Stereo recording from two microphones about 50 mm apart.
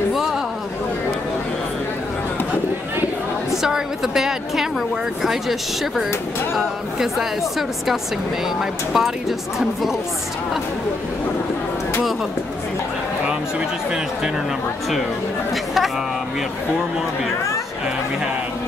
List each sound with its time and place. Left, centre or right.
0.1 s a sound: centre
3.6 s a woman's voice: centre
15.5 s speech: centre